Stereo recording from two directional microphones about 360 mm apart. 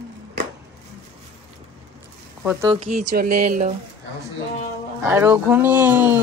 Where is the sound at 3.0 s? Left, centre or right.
Right.